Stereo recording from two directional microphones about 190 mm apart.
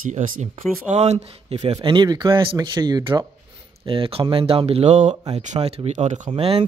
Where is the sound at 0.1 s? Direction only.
40° right (ahead or behind).